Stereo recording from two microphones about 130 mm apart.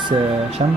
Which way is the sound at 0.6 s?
50° right (ahead or behind).